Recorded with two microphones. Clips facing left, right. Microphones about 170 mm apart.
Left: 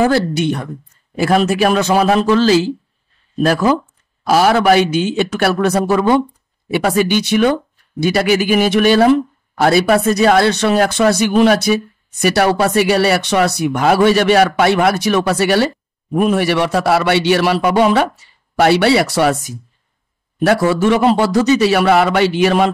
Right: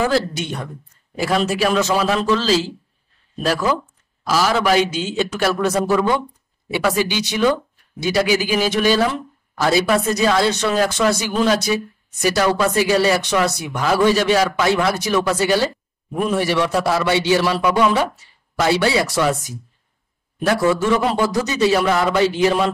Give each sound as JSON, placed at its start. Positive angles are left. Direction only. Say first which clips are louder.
{"t": 1.2, "sound": "speech", "louder": "left 5 dB", "side_deg": 60}
{"t": 4.3, "sound": "a man's voice", "louder": "left 6 dB", "side_deg": 60}
{"t": 20.4, "sound": "a man's voice", "louder": "left 4 dB", "side_deg": 70}